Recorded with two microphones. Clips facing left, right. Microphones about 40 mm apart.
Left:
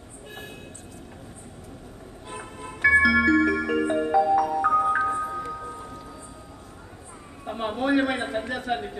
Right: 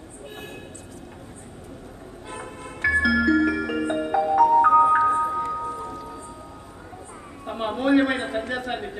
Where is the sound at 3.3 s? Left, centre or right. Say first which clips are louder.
Even; left.